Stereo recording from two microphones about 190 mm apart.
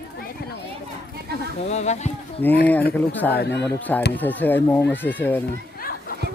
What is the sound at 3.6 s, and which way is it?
Speech, 10° left (ahead or behind).